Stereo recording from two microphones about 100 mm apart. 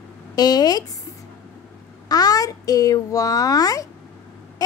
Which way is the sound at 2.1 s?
40° left (ahead or behind).